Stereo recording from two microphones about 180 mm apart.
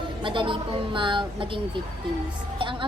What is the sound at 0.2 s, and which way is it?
A woman's voice, 25° right (ahead or behind).